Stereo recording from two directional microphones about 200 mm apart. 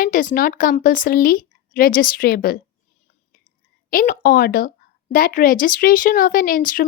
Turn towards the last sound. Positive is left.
turn(degrees=45)  # may be behind; listen again after turning